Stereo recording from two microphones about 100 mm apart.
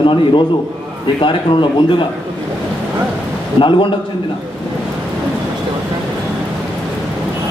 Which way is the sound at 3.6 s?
55° left (ahead or behind).